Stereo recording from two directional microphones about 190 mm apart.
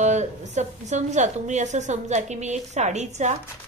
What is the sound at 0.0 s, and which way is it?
A woman's voice, 40° right (ahead or behind).